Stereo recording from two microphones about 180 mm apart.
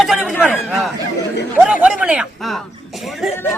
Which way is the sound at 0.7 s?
Centre (ahead or behind).